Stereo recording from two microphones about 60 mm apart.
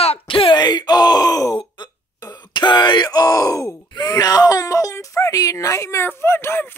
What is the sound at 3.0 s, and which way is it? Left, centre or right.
Speech, left.